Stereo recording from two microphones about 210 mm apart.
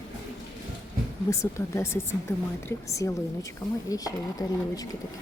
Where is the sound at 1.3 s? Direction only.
15° left (ahead or behind).